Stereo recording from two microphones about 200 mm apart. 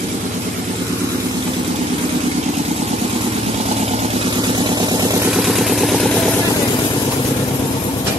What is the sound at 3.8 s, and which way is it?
Vehicle, 30° right (ahead or behind).